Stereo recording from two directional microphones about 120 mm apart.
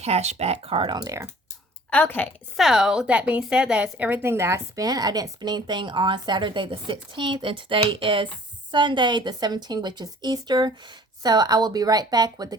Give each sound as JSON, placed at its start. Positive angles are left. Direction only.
{"t": 0.0, "sound": "speech", "side_deg": -65}
{"t": 1.9, "sound": "a woman's voice", "side_deg": 15}
{"t": 2.6, "sound": "a woman's voice", "side_deg": -5}